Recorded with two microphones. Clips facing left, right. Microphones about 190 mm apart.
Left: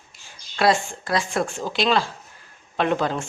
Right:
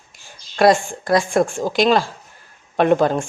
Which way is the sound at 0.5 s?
45° right (ahead or behind).